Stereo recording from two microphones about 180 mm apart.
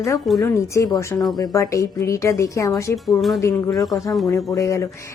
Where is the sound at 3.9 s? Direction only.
20° left (ahead or behind).